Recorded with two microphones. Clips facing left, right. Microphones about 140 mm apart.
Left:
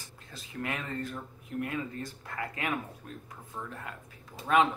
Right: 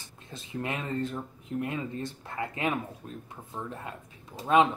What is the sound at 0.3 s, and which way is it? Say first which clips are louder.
Speech: right 2 dB; 25° right (ahead or behind).